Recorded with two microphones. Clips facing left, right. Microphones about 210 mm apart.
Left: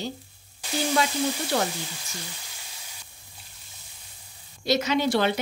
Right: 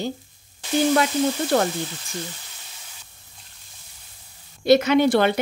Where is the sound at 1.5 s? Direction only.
55° right (ahead or behind).